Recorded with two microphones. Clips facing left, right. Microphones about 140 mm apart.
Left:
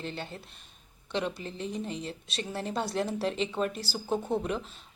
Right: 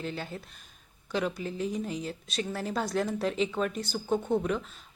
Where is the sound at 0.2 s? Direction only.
Centre (ahead or behind).